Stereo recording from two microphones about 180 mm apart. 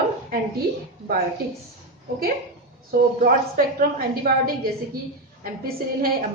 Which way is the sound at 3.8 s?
55° right (ahead or behind).